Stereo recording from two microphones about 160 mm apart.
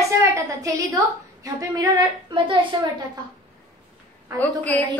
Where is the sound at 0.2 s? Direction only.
20° right (ahead or behind).